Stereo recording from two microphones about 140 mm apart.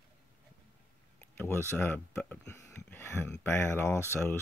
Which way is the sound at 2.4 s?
20° left (ahead or behind).